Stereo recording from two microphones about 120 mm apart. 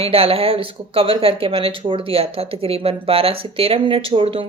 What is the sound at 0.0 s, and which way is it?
Speech, 50° right (ahead or behind).